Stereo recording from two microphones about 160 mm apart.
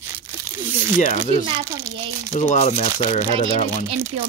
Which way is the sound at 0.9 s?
50° left (ahead or behind).